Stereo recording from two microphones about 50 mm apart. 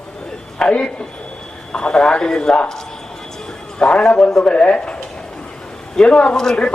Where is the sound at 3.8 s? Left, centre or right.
Centre.